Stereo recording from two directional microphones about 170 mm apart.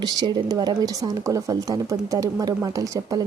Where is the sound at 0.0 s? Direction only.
25° right (ahead or behind).